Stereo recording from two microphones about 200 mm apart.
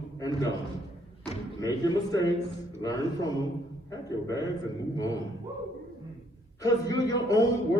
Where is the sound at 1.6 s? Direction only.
20° left (ahead or behind).